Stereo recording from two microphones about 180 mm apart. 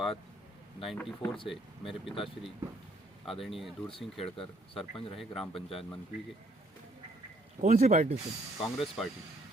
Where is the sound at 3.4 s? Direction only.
Centre (ahead or behind).